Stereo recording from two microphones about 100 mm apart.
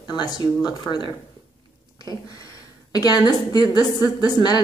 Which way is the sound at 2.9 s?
40° left (ahead or behind).